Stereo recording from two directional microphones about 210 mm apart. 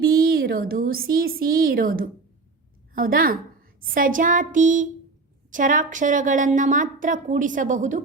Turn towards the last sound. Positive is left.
turn(degrees=-35)  # may be behind; listen again after turning